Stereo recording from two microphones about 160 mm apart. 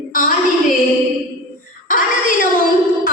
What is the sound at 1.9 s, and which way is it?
Music, 60° left (ahead or behind).